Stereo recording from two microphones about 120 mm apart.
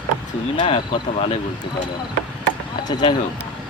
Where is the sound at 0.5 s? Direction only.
45° left (ahead or behind).